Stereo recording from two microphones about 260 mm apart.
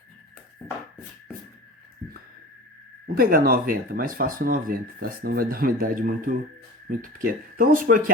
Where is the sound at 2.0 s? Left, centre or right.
Centre.